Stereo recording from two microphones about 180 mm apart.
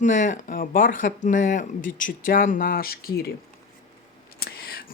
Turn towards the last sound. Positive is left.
turn(degrees=60)  # may be behind; listen again after turning